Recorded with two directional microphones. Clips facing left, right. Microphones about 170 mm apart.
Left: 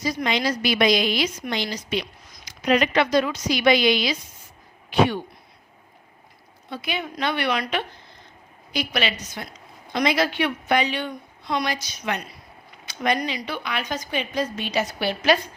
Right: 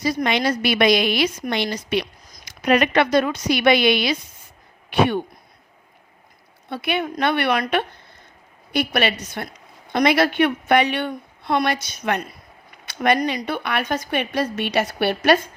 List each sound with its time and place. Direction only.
0.3 s a woman's voice: 60° right (ahead or behind)
6.7 s a woman's voice: 60° right (ahead or behind)